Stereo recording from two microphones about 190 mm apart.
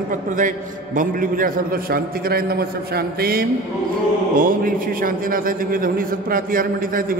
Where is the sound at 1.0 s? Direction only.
45° right (ahead or behind).